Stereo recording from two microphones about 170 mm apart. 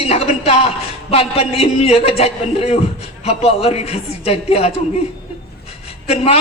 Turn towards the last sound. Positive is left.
turn(degrees=35)  # may be behind; listen again after turning